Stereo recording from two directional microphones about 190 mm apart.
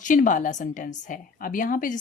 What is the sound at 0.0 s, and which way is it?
A woman's voice, 45° left (ahead or behind).